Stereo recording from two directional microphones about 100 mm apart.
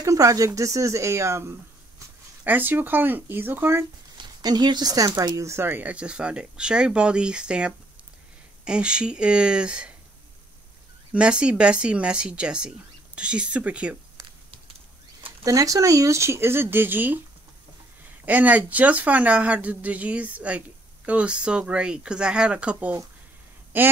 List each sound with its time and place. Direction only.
0.0 s speech: 35° right (ahead or behind)
4.2 s speech: 45° right (ahead or behind); by 9.9 s 10° right (ahead or behind)
11.1 s speech: 10° right (ahead or behind)
15.4 s speech: 35° right (ahead or behind); by 17.2 s 20° right (ahead or behind)
18.2 s speech: 15° right (ahead or behind)